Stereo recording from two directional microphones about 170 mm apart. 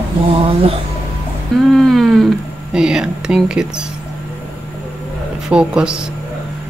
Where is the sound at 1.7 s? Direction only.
Centre (ahead or behind).